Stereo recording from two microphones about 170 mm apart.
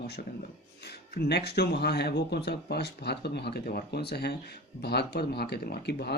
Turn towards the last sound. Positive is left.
turn(degrees=75)  # may be behind; listen again after turning